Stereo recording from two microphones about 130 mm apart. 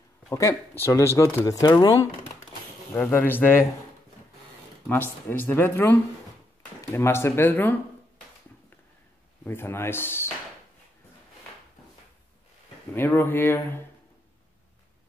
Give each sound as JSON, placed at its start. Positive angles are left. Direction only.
{"t": 0.3, "sound": "speech", "side_deg": 20}
{"t": 2.9, "sound": "speech", "side_deg": 15}
{"t": 5.3, "sound": "speech", "side_deg": 15}
{"t": 9.4, "sound": "speech", "side_deg": 15}
{"t": 12.9, "sound": "speech", "side_deg": 15}